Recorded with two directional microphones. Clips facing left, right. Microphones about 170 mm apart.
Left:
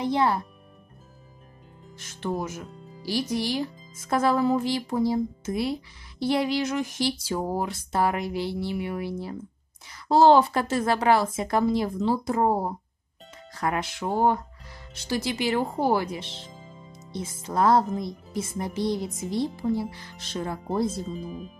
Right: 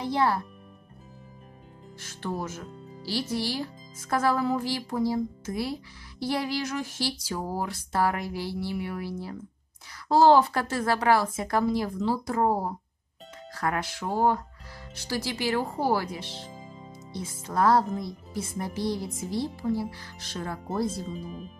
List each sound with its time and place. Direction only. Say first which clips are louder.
0.0 s speech: left 2 dB; 20° left (ahead or behind)
2.0 s speech: left 3 dB; 20° left (ahead or behind)